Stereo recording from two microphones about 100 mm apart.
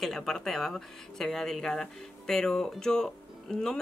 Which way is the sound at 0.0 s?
5° left (ahead or behind).